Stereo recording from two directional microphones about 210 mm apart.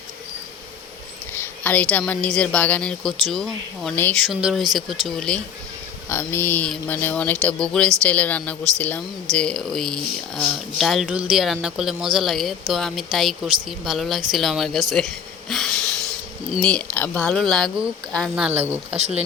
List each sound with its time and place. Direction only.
1.3 s a woman's voice: 10° left (ahead or behind); by 18.9 s 10° right (ahead or behind)
18.9 s speech: 30° right (ahead or behind)